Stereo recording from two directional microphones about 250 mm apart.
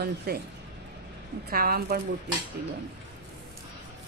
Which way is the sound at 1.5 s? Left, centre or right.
Right.